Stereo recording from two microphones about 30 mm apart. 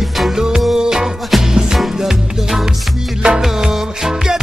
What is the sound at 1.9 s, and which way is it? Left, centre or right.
Music, centre.